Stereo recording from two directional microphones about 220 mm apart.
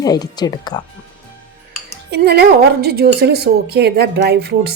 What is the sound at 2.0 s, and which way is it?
A woman's voice, 50° right (ahead or behind).